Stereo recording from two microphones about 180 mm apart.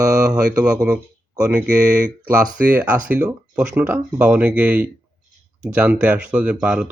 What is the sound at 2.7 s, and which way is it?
Speech, 10° right (ahead or behind).